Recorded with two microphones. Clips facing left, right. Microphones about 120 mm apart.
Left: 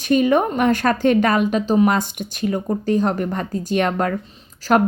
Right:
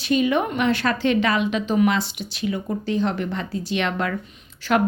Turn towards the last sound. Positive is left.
turn(degrees=40)  # may be behind; listen again after turning